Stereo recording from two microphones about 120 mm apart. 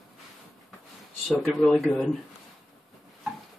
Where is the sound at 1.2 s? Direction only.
Centre (ahead or behind).